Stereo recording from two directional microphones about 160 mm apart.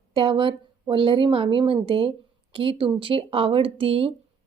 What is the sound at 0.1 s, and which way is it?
A woman's voice, 30° right (ahead or behind).